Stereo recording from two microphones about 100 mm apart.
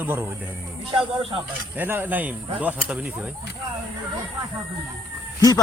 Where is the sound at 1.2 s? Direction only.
60° right (ahead or behind).